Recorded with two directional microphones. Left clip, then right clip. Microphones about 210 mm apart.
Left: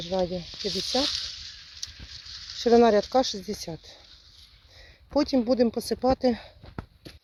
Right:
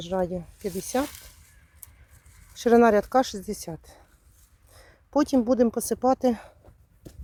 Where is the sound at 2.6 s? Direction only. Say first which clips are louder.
Right 1 dB; 15° right (ahead or behind).